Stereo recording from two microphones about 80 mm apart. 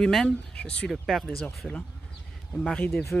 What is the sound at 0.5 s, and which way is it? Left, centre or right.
Speech, centre.